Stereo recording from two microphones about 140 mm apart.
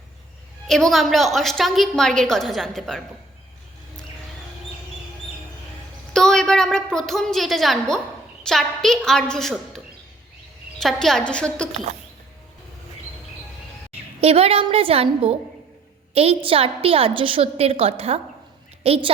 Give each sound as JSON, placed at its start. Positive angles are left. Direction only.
{"t": 0.7, "sound": "a woman's voice", "side_deg": 0}
{"t": 6.1, "sound": "a woman's voice", "side_deg": 5}
{"t": 14.2, "sound": "a woman's voice", "side_deg": -45}